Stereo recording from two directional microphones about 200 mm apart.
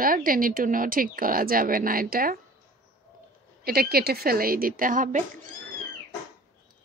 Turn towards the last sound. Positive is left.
turn(degrees=-40)  # may be behind; listen again after turning